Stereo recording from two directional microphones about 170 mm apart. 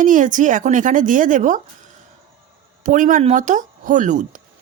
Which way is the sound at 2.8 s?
50° right (ahead or behind).